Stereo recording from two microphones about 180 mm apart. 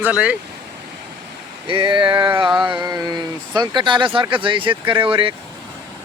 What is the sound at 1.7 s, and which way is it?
Speech, 30° right (ahead or behind).